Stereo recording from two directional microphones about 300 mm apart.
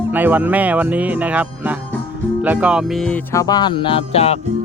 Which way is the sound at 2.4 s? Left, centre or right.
Centre.